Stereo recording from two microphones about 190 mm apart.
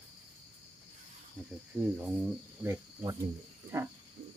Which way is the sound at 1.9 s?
5° right (ahead or behind).